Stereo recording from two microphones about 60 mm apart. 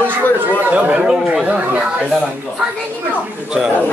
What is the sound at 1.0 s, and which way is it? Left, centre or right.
Speech, centre.